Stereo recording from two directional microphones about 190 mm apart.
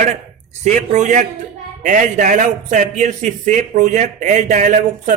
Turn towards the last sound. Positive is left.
turn(degrees=-40)  # may be behind; listen again after turning